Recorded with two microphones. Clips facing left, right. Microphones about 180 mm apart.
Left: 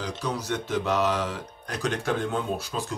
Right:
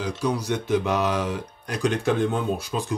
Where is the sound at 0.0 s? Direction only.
10° right (ahead or behind).